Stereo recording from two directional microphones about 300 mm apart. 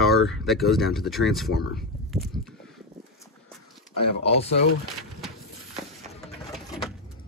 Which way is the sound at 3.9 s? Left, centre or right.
Left.